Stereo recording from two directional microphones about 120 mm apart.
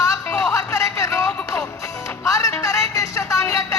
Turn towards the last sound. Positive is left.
turn(degrees=25)  # may be behind; listen again after turning